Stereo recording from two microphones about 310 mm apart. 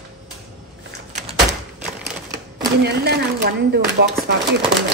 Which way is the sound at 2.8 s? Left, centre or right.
Right.